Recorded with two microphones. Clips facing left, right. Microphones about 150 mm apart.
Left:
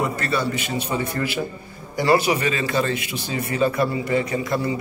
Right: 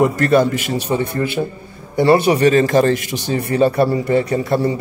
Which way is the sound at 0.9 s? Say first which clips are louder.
Right 6 dB; 35° right (ahead or behind).